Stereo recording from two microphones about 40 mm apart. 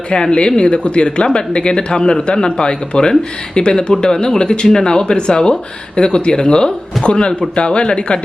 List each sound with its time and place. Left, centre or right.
0.1 s speech: left